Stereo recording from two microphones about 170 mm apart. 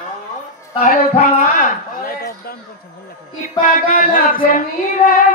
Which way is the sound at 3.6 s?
50° left (ahead or behind).